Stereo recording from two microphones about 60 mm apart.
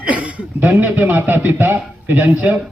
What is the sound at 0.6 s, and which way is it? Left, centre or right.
A man's voice, right.